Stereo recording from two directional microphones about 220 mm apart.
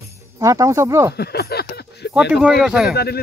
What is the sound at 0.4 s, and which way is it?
Speech, 15° right (ahead or behind).